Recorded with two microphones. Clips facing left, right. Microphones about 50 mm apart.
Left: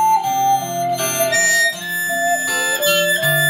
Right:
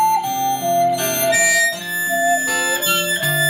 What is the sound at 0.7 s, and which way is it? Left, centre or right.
Music, right.